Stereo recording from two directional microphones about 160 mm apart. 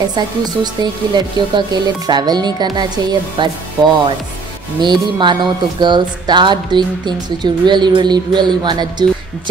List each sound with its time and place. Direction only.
1.1 s speech: 25° right (ahead or behind)